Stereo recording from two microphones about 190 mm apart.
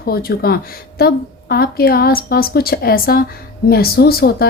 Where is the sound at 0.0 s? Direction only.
55° left (ahead or behind).